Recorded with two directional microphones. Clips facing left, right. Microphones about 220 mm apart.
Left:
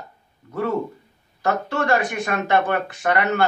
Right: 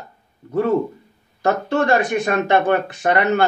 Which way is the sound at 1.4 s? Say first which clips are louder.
Right 4 dB; 25° right (ahead or behind).